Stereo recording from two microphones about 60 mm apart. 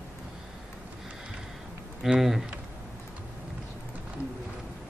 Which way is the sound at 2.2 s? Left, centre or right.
Centre.